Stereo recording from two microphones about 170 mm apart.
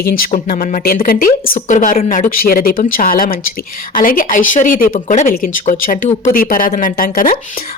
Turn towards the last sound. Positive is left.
turn(degrees=55)  # may be behind; listen again after turning